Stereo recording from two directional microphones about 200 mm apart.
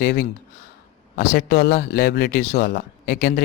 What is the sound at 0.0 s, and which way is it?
Speech, 50° left (ahead or behind).